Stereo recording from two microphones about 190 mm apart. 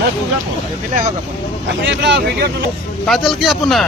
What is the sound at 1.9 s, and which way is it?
Speech, 65° right (ahead or behind).